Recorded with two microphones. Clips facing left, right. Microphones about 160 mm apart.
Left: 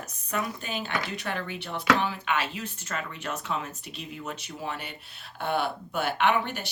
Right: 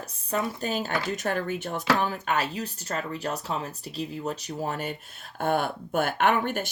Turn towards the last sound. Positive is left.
turn(degrees=-50)  # may be behind; listen again after turning